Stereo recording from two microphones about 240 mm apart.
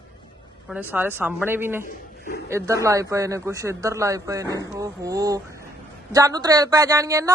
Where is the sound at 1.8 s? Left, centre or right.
Left.